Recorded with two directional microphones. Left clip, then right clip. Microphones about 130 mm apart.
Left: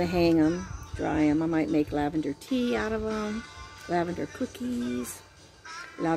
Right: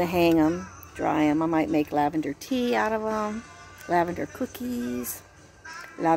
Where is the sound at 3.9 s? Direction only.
5° left (ahead or behind).